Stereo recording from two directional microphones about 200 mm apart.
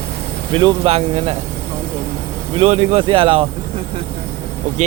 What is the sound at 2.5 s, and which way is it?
Speech, 30° right (ahead or behind).